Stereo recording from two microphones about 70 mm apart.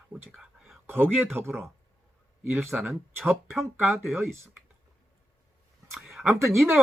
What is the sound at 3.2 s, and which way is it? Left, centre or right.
Speech, right.